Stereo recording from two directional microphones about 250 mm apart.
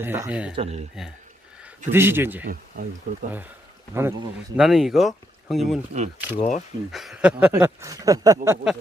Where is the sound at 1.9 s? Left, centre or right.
Centre.